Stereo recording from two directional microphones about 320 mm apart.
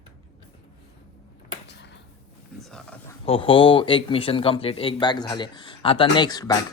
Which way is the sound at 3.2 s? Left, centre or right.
Centre.